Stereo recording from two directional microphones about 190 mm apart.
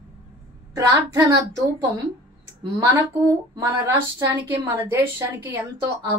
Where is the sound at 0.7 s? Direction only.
15° right (ahead or behind).